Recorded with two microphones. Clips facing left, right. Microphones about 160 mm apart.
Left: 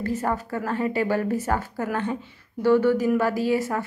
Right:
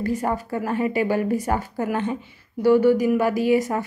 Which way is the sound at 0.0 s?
15° right (ahead or behind).